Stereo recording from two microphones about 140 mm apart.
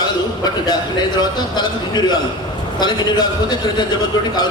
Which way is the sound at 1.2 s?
30° left (ahead or behind).